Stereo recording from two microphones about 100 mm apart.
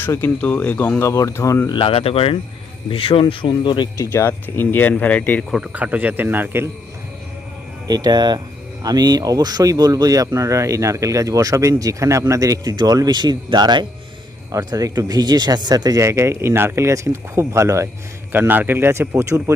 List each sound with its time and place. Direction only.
0.0 s speech: 20° left (ahead or behind)
1.7 s speech: 65° left (ahead or behind)
3.9 s speech: 30° left (ahead or behind)
5.5 s speech: 5° right (ahead or behind)
5.7 s speech: 15° right (ahead or behind)
7.9 s speech: 40° right (ahead or behind)
14.5 s speech: 40° right (ahead or behind)